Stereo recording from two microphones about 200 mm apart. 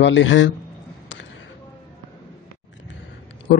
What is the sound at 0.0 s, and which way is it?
Speech, 70° left (ahead or behind).